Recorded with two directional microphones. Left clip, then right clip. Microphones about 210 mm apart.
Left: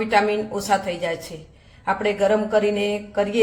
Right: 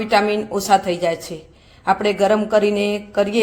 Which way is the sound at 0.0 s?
40° right (ahead or behind).